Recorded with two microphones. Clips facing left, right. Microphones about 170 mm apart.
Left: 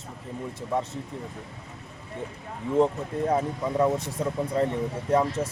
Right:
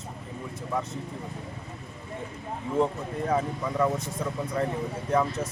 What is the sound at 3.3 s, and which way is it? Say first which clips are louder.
Speech: even; 25° left (ahead or behind).